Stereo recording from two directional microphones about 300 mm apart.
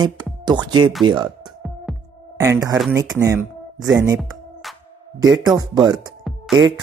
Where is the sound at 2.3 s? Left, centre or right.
Centre.